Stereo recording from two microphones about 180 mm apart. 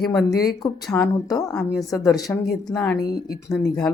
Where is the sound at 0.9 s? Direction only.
15° left (ahead or behind).